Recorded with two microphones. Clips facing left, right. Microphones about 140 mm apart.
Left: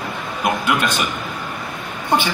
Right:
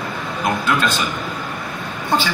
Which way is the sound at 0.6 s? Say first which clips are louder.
Even; 15° left (ahead or behind).